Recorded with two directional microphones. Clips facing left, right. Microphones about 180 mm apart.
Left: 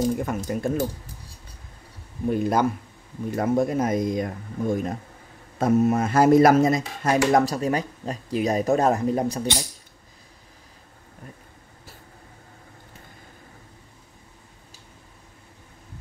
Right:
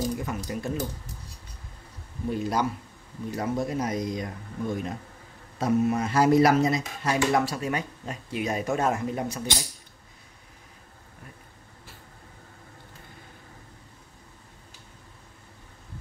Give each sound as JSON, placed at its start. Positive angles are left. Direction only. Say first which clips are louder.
{"t": 0.2, "sound": "speech", "louder": "left 5 dB", "side_deg": 50}
{"t": 2.2, "sound": "speech", "louder": "left 5 dB", "side_deg": 55}